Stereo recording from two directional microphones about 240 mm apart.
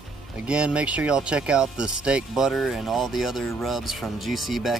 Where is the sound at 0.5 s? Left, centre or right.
Centre.